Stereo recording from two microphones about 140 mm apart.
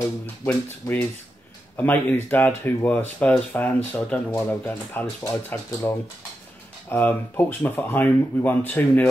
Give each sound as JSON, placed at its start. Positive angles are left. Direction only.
{"t": 0.5, "sound": "speech", "side_deg": 10}